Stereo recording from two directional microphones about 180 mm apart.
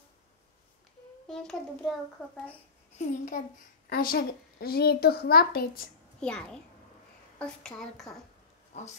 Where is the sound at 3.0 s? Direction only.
40° left (ahead or behind).